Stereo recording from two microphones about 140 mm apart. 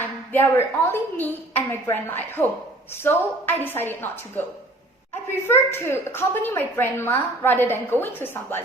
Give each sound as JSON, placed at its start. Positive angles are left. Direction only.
{"t": 0.3, "sound": "a woman's voice", "side_deg": 15}
{"t": 5.5, "sound": "a woman's voice", "side_deg": 15}